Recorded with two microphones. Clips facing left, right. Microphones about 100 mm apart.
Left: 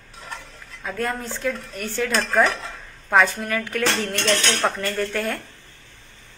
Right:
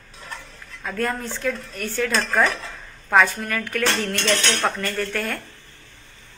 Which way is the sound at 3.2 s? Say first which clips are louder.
Left 1 dB; 15° left (ahead or behind).